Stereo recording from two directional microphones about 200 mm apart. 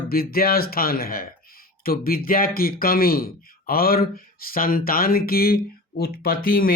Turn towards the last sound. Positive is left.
turn(degrees=45)  # may be behind; listen again after turning